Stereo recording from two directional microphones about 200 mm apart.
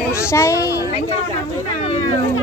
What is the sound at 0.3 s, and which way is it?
Speech, 15° left (ahead or behind).